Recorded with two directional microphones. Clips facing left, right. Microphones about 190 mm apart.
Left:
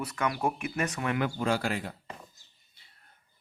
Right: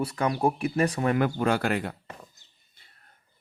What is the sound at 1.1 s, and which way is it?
Speech, 50° right (ahead or behind).